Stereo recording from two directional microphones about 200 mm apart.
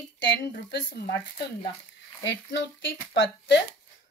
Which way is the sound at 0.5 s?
55° left (ahead or behind).